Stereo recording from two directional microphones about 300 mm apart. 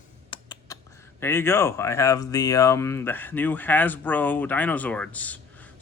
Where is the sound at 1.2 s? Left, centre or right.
Centre.